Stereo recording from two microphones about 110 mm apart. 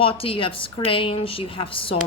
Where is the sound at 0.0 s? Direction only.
55° left (ahead or behind).